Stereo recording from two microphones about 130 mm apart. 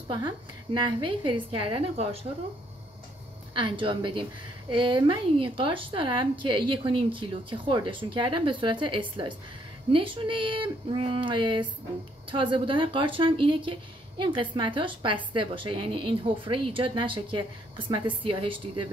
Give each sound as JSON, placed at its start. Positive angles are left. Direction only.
{"t": 0.7, "sound": "a woman's voice", "side_deg": -35}
{"t": 3.5, "sound": "a woman's voice", "side_deg": -40}